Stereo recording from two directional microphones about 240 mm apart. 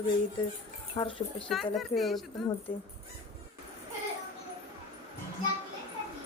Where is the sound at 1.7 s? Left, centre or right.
Centre.